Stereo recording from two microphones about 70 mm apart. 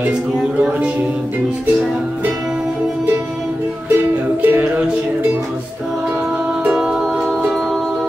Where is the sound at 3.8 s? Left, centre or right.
Right.